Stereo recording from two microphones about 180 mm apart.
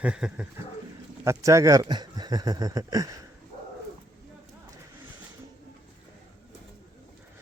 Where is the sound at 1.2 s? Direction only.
15° right (ahead or behind).